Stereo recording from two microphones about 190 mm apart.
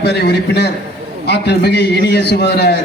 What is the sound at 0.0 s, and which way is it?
A man's voice, 60° left (ahead or behind).